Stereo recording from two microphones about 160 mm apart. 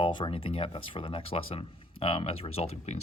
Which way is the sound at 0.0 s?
30° left (ahead or behind).